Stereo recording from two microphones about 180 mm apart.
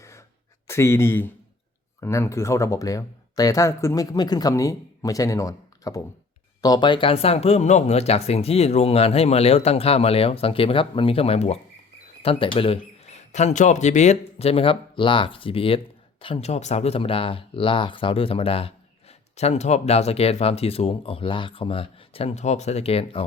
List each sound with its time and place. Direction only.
0.7 s speech: 15° left (ahead or behind); by 23.2 s 35° left (ahead or behind)